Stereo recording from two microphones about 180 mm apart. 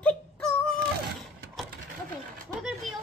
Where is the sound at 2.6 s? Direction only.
Centre (ahead or behind).